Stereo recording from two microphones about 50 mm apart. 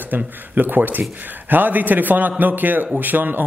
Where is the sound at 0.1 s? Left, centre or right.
Right.